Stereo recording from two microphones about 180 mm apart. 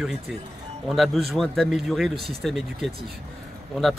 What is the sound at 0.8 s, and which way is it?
Speech, centre (ahead or behind).